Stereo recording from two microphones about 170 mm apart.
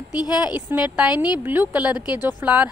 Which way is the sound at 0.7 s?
10° right (ahead or behind).